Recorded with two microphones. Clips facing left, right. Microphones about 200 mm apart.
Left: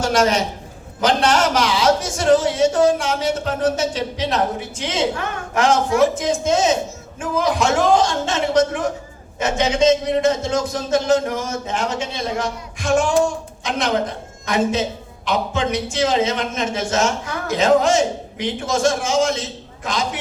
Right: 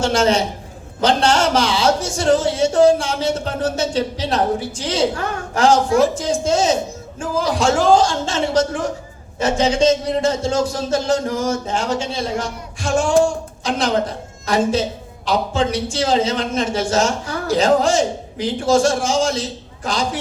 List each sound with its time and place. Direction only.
0.0 s speech: 25° right (ahead or behind)